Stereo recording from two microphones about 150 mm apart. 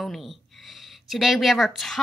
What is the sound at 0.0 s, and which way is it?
A woman's voice, centre (ahead or behind).